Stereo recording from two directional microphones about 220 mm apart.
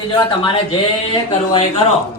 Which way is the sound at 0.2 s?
20° left (ahead or behind).